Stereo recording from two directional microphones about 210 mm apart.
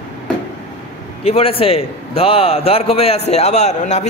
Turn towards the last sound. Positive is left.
turn(degrees=35)  # may be behind; listen again after turning